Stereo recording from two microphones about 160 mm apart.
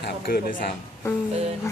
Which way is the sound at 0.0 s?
75° left (ahead or behind).